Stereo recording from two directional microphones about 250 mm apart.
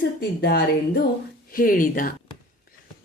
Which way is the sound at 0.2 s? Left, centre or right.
Left.